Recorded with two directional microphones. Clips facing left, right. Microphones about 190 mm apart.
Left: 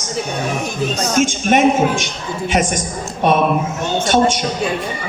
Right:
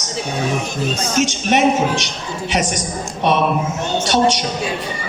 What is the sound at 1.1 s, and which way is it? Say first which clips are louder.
A man's voice: left 2 dB; 50° left (ahead or behind).